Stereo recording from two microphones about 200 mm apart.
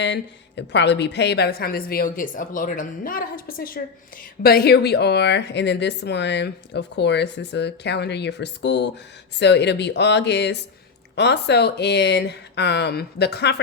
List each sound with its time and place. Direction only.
0.0 s a woman's voice: 60° left (ahead or behind)